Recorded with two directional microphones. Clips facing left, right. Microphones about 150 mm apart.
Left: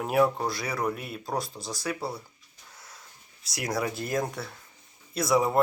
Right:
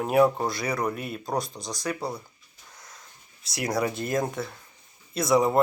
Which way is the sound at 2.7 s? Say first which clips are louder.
Right 1 dB; 5° left (ahead or behind).